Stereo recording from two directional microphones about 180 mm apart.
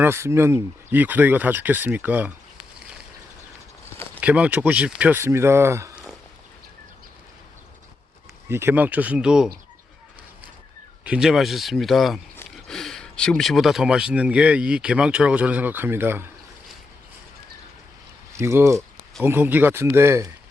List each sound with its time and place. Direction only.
0.0 s speech: 15° right (ahead or behind)
4.2 s speech: 10° right (ahead or behind)
8.4 s speech: 15° right (ahead or behind)
11.0 s speech: 5° right (ahead or behind)
18.3 s speech: 15° right (ahead or behind)